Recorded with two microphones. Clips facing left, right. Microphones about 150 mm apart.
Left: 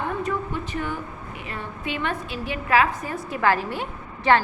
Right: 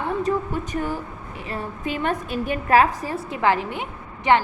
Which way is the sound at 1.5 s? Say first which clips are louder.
Right 4 dB; 40° right (ahead or behind).